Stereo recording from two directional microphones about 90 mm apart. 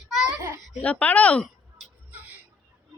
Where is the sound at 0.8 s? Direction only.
15° left (ahead or behind).